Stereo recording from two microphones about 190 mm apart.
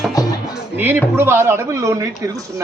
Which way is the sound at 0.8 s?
10° right (ahead or behind).